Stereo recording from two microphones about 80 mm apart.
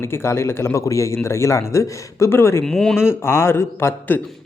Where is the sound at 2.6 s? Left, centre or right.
Centre.